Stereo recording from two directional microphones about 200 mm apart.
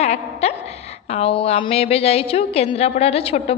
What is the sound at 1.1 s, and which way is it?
A woman's voice, 30° left (ahead or behind).